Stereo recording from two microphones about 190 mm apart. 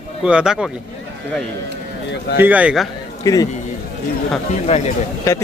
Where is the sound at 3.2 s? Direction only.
20° left (ahead or behind).